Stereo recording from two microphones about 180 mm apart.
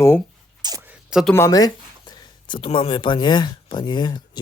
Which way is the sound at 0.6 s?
20° right (ahead or behind).